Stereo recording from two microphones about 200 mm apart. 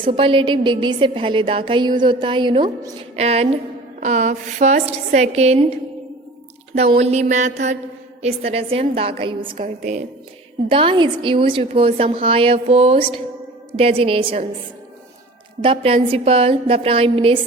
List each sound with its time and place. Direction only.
0.0 s a woman's voice: 25° right (ahead or behind)
9.6 s a woman's voice: 40° right (ahead or behind)
10.7 s a woman's voice: 25° right (ahead or behind)
15.6 s a woman's voice: 25° right (ahead or behind)